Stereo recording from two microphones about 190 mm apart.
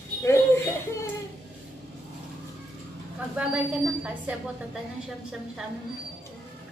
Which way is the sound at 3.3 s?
5° right (ahead or behind).